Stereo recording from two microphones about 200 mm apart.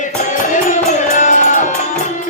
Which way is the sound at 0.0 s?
40° left (ahead or behind).